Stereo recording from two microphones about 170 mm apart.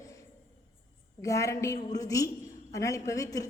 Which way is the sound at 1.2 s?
20° left (ahead or behind).